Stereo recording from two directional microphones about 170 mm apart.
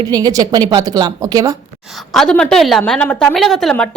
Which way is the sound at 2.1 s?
5° left (ahead or behind).